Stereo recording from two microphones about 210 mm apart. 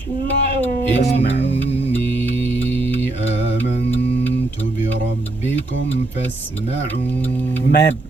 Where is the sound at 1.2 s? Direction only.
55° left (ahead or behind).